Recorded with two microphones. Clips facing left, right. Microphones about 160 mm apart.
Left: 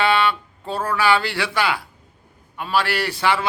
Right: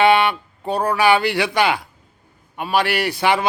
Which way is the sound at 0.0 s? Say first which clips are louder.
Right 4 dB; 15° right (ahead or behind).